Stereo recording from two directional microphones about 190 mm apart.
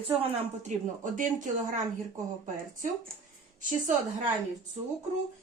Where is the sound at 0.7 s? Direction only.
40° right (ahead or behind).